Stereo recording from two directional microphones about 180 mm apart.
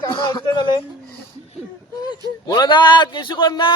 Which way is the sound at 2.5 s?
25° left (ahead or behind).